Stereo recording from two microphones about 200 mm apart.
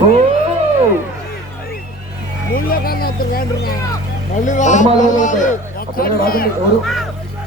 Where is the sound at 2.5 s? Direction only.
50° left (ahead or behind).